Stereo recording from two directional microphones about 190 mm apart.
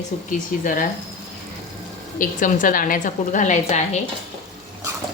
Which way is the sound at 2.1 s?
45° left (ahead or behind).